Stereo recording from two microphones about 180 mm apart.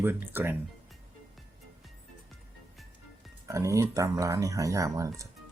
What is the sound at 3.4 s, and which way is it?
Speech, 15° right (ahead or behind).